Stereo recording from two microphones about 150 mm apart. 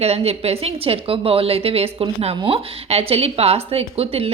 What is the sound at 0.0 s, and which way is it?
Speech, 45° right (ahead or behind).